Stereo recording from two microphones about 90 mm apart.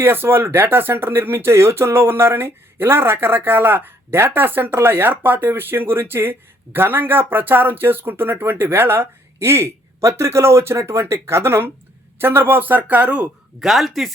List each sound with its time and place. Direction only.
0.0 s speech: 25° right (ahead or behind)
13.6 s speech: centre (ahead or behind)